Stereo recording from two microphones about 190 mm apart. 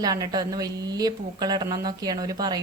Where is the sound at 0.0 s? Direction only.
20° right (ahead or behind).